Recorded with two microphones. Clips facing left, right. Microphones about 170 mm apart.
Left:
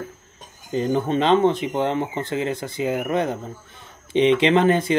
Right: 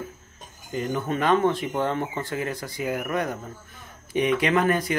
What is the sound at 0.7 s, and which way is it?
Speech, 30° left (ahead or behind).